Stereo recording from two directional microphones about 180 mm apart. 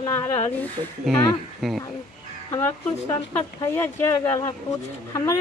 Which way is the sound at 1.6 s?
Centre (ahead or behind).